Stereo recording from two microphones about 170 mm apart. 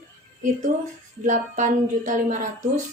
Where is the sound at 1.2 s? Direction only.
45° right (ahead or behind).